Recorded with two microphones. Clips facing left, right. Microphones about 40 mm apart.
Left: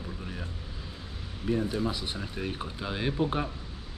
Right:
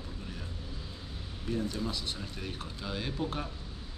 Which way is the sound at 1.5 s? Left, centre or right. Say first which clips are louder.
Left 5 dB; left.